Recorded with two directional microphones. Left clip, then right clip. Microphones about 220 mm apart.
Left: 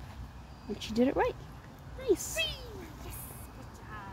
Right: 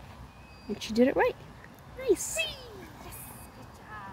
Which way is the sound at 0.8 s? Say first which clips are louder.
Right 4 dB; 15° right (ahead or behind).